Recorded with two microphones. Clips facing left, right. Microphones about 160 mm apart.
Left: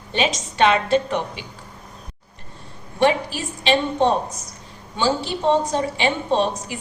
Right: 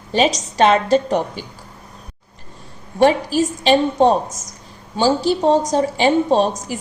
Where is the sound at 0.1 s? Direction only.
40° right (ahead or behind).